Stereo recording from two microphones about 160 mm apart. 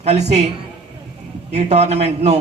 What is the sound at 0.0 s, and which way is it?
Speech, 45° right (ahead or behind).